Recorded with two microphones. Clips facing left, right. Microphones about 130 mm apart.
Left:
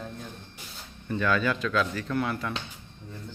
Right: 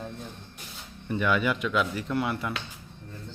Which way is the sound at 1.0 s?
15° right (ahead or behind).